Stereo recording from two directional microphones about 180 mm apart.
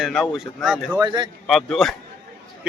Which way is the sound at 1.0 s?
25° right (ahead or behind).